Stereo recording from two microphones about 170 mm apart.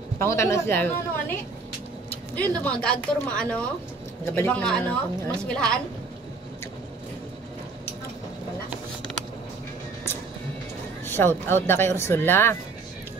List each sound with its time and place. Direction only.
0.2 s a woman's voice: 15° left (ahead or behind)
2.3 s a woman's voice: 10° left (ahead or behind)
11.1 s a woman's voice: 15° left (ahead or behind)